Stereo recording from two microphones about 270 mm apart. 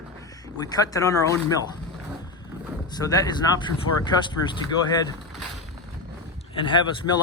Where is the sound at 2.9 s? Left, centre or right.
Centre.